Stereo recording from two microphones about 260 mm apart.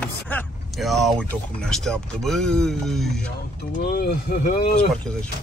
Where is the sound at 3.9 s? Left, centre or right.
Left.